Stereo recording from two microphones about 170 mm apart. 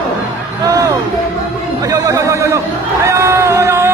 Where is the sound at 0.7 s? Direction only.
20° right (ahead or behind).